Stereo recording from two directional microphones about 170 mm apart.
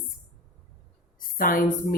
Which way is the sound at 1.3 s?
55° left (ahead or behind).